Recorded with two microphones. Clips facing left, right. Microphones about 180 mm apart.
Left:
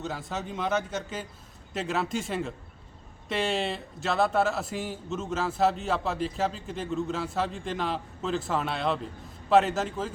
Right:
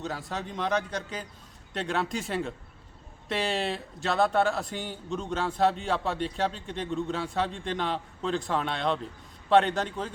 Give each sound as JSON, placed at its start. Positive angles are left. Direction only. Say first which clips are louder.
{"t": 0.0, "sound": "speech", "louder": "even", "side_deg": 0}